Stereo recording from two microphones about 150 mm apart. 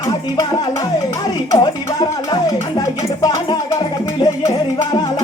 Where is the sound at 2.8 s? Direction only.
25° left (ahead or behind).